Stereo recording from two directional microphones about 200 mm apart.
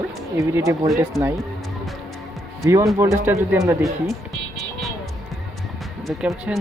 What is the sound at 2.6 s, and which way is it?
Speech, 15° right (ahead or behind).